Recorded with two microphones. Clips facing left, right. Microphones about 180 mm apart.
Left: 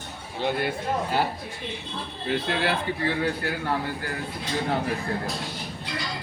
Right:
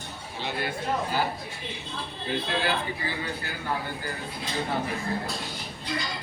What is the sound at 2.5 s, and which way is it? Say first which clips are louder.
A man's voice: left 1 dB; 70° left (ahead or behind).